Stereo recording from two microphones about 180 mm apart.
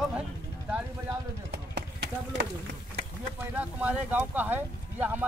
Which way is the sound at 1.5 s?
65° right (ahead or behind).